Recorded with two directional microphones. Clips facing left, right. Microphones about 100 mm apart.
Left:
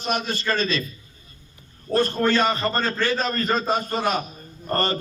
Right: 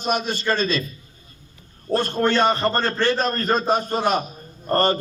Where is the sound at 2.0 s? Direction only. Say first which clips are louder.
Even; 25° right (ahead or behind).